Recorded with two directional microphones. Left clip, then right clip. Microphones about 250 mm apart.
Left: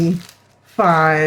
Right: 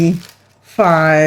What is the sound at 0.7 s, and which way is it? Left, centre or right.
Speech, right.